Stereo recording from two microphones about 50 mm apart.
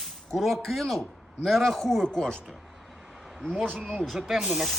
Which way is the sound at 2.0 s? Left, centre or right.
Centre.